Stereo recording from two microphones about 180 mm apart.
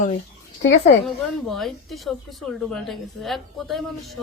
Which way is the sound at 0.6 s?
85° left.